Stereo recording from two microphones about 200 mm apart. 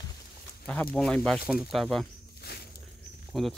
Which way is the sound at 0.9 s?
5° left (ahead or behind).